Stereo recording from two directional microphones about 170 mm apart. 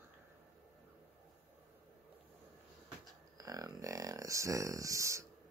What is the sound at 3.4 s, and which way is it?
Speech, 20° right (ahead or behind).